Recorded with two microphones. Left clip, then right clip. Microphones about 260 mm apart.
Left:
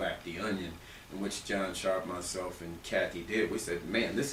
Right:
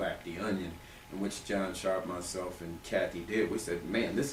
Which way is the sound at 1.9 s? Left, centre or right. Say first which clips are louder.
Even; centre.